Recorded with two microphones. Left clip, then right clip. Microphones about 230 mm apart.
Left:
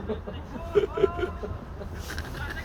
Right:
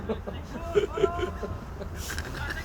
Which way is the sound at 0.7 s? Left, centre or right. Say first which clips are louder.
Left 1 dB; centre.